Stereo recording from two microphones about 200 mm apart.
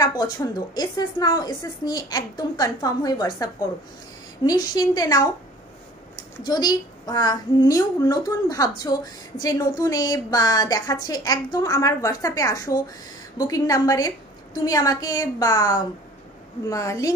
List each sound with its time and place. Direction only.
0.0 s a woman's voice: 20° left (ahead or behind)
4.5 s a woman's voice: 20° left (ahead or behind)
6.4 s a woman's voice: 20° left (ahead or behind)